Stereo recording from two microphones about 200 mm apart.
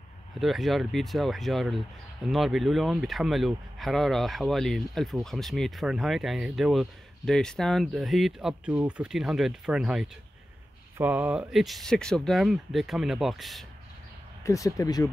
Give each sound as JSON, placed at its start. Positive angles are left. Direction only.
{"t": 0.4, "sound": "speech", "side_deg": 0}
{"t": 14.4, "sound": "speech", "side_deg": 15}